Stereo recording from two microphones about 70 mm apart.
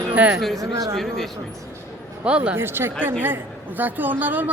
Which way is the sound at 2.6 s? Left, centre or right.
Right.